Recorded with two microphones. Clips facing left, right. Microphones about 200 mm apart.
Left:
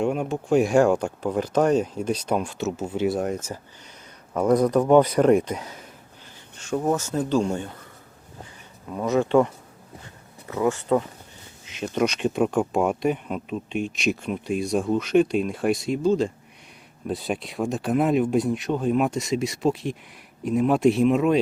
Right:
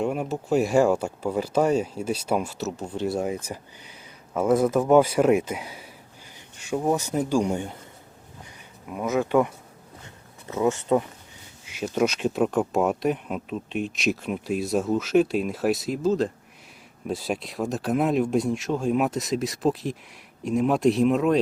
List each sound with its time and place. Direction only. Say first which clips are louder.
0.0 s speech: left 2 dB; 5° right (ahead or behind)
4.4 s a man's voice: left 1 dB; 5° right (ahead or behind)
8.9 s speech: left 2 dB; 5° right (ahead or behind)
10.5 s speech: even; 20° right (ahead or behind)
11.6 s speech: even; 5° right (ahead or behind)